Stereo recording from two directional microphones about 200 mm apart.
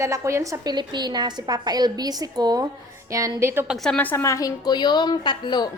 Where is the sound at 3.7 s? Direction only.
5° left (ahead or behind).